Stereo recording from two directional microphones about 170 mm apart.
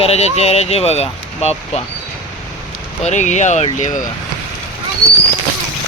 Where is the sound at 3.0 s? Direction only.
45° left (ahead or behind).